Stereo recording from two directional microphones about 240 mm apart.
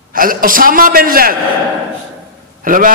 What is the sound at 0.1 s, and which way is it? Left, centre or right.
A man's voice, right.